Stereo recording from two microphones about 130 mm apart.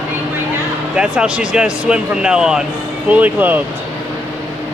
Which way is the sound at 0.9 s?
10° right (ahead or behind).